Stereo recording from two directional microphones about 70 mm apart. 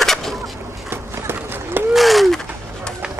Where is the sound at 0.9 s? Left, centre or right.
Right.